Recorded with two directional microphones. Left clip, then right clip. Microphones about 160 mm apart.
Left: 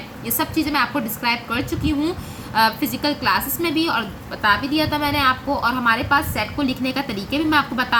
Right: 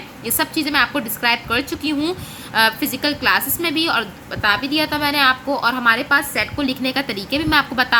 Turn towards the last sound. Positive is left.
turn(degrees=-50)  # may be behind; listen again after turning